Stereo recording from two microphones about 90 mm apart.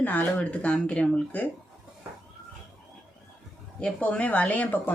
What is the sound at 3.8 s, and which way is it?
Speech, 10° left (ahead or behind).